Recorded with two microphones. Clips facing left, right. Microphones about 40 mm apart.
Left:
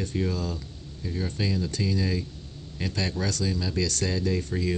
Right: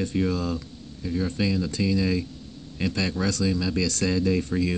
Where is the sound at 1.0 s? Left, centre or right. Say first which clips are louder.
Right 4 dB; centre.